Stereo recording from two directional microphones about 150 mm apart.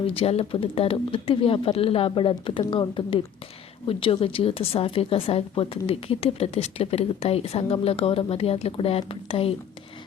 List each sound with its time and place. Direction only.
0.1 s a woman's voice: 40° left (ahead or behind)